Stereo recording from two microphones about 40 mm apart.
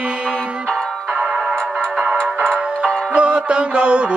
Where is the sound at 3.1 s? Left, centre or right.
Right.